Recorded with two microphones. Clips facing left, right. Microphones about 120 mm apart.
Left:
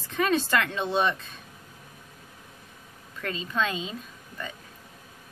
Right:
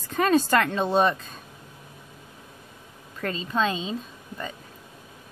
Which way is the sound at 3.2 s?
35° right (ahead or behind).